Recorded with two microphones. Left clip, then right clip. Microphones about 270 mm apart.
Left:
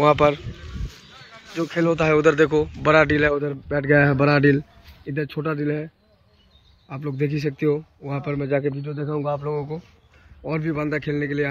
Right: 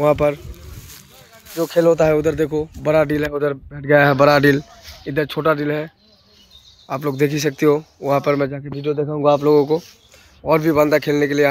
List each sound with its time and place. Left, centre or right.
0.0 s speech: centre
1.6 s speech: centre
6.9 s speech: centre
10.4 s speech: centre